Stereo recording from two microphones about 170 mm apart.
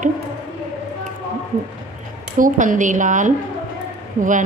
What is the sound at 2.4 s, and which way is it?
A woman's voice, 50° right (ahead or behind).